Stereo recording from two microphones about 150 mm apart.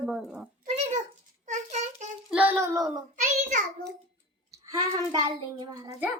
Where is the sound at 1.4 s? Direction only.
55° right (ahead or behind).